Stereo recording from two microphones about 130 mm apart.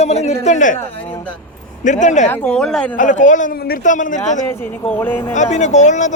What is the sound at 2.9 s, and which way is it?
A man's voice, 75° left (ahead or behind).